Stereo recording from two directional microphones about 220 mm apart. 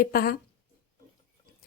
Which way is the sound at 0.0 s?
45° left (ahead or behind).